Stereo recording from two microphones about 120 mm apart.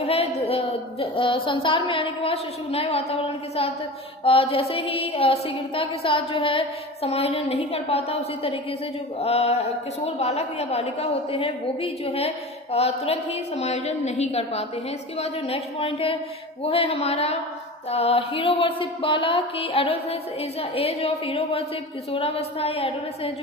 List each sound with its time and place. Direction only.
0.0 s a woman's voice: 60° left (ahead or behind)